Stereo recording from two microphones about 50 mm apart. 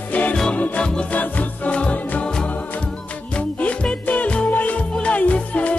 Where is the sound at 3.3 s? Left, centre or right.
Left.